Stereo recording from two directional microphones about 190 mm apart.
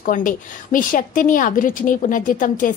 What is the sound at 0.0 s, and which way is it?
A woman's voice, 45° left (ahead or behind).